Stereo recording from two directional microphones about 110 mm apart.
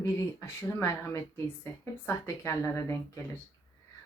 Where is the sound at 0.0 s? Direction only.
20° left (ahead or behind).